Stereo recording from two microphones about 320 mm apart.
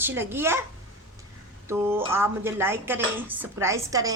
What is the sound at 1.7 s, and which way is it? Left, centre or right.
Speech, centre.